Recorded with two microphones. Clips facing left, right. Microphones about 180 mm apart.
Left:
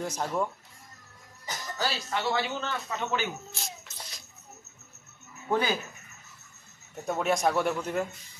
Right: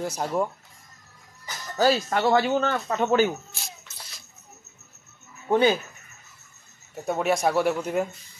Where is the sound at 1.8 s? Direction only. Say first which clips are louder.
Right 10 dB; 50° right (ahead or behind).